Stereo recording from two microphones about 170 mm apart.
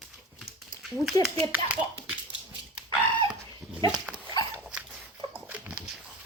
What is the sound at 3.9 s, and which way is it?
Dog, 10° right (ahead or behind).